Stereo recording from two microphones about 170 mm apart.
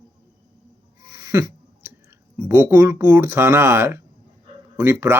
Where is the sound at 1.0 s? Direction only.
20° right (ahead or behind).